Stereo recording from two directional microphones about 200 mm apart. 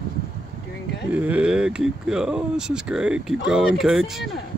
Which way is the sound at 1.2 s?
5° right (ahead or behind).